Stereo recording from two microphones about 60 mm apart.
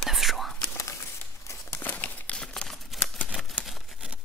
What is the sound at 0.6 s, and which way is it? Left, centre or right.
Whispering, left.